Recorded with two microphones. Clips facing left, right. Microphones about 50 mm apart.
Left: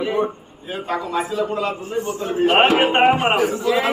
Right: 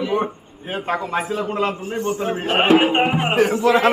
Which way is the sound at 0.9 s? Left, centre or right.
Right.